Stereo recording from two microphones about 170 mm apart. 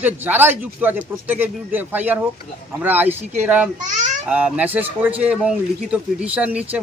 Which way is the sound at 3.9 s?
45° right (ahead or behind).